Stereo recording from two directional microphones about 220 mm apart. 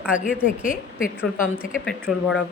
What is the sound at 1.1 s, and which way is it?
A woman's voice, centre (ahead or behind).